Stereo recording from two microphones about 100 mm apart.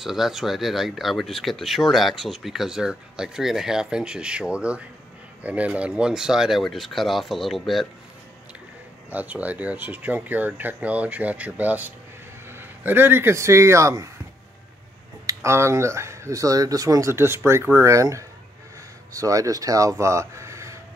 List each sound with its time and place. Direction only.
0.0 s speech: 5° right (ahead or behind)
9.1 s speech: 15° right (ahead or behind); by 14.1 s 30° right (ahead or behind)
15.2 s speech: 25° right (ahead or behind)